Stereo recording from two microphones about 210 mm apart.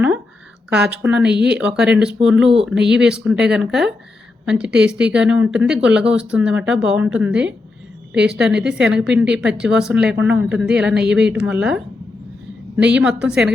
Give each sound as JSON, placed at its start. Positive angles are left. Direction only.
{"t": 0.7, "sound": "a woman's voice", "side_deg": -5}